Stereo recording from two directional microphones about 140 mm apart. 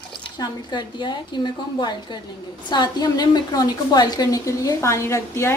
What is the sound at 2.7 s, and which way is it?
A woman's voice, 30° left (ahead or behind).